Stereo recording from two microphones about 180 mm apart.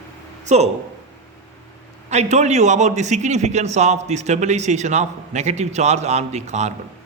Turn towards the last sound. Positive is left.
turn(degrees=-40)  # may be behind; listen again after turning